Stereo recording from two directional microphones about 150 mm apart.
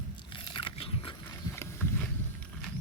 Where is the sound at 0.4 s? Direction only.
35° left (ahead or behind).